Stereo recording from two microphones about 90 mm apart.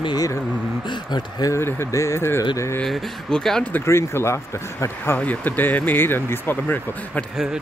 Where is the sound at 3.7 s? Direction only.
30° left (ahead or behind).